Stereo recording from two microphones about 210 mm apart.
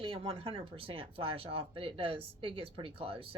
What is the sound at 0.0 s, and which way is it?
Speech, 25° right (ahead or behind).